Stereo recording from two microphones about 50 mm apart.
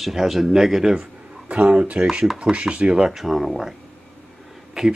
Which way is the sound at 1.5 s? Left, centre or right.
Right.